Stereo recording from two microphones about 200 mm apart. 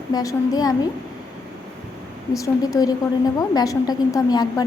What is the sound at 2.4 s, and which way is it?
A woman's voice, 15° left (ahead or behind).